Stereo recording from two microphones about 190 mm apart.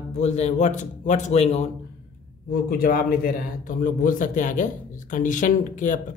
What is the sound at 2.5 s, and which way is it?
Speech, 50° left (ahead or behind).